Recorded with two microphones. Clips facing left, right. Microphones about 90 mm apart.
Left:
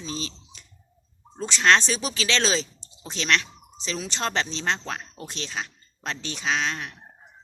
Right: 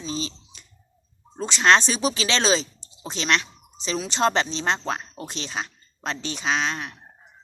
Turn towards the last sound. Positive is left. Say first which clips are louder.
# right 2 dB
turn(degrees=-10)  # may be behind; listen again after turning